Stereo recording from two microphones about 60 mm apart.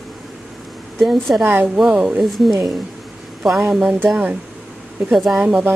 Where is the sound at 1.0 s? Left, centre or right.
Centre.